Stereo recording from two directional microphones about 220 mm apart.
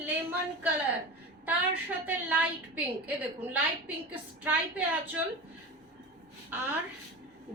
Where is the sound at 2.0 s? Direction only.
10° right (ahead or behind).